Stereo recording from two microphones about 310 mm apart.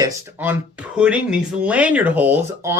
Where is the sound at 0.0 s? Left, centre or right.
Centre.